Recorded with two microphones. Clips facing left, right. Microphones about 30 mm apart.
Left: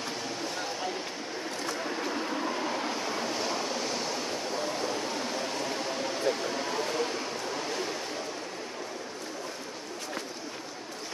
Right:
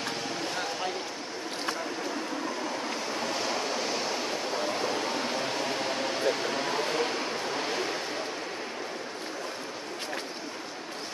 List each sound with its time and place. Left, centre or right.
2.9 s waves: centre
3.4 s waves: centre
6.2 s a sound: right